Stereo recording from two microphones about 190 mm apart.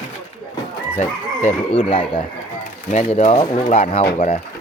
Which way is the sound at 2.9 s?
40° left (ahead or behind).